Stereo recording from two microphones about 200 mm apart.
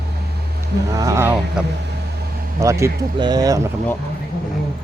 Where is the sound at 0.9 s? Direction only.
15° right (ahead or behind).